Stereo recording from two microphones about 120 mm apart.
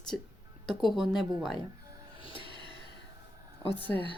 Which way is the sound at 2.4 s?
40° right (ahead or behind).